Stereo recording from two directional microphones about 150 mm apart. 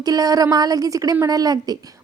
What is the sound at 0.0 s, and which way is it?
A woman's voice, 25° right (ahead or behind).